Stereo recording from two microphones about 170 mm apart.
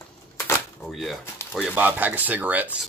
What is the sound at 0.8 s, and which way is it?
Speech, centre (ahead or behind).